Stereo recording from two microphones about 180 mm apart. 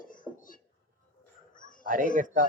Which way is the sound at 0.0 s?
50° left (ahead or behind).